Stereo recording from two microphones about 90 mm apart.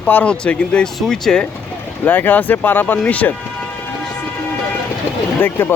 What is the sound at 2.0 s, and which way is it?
Speech, 20° left (ahead or behind).